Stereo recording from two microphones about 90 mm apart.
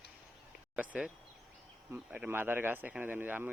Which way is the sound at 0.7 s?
15° right (ahead or behind).